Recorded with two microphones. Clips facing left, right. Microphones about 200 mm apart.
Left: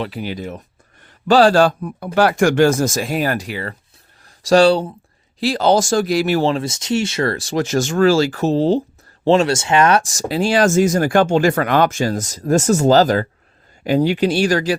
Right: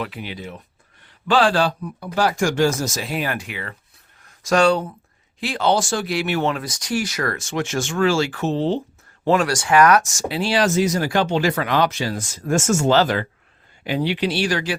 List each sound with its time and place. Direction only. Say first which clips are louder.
0.0 s speech: left 5 dB; 40° left (ahead or behind)
2.1 s speech: left 6 dB; 65° left (ahead or behind); by 8.8 s 40° left (ahead or behind)
9.2 s speech: left 4 dB; 25° left (ahead or behind); by 14.8 s 40° left (ahead or behind)